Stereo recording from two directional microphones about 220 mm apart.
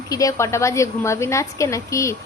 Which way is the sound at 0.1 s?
15° left (ahead or behind).